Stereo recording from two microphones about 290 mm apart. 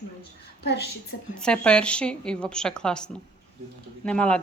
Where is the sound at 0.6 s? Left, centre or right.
Left.